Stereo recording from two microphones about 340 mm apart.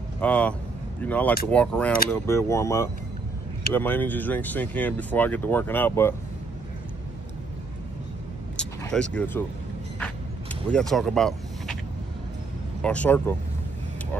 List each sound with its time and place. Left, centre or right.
0.2 s speech: centre
8.5 s vehicle: centre
12.8 s speech: centre